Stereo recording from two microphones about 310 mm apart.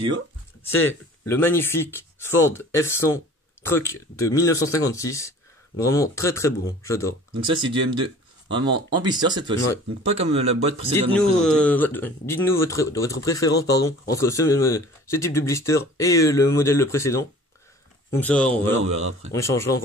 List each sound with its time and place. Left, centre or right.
0.7 s speech: centre
7.4 s speech: centre
11.1 s speech: centre